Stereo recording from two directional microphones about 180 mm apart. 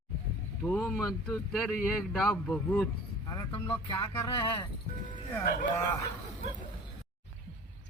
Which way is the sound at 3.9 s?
15° left (ahead or behind).